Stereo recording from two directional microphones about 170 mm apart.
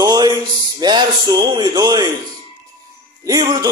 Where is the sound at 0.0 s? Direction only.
25° right (ahead or behind).